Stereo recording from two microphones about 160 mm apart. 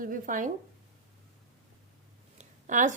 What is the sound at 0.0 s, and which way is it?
Speech, 60° right (ahead or behind).